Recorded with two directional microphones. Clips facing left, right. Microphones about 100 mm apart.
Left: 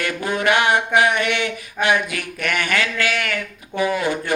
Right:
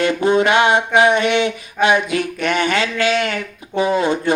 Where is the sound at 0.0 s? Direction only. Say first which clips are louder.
Right 7 dB; 20° right (ahead or behind).